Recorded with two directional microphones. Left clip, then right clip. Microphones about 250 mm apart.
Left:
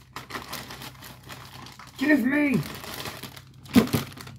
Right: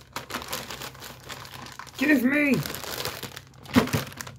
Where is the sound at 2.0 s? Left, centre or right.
Right.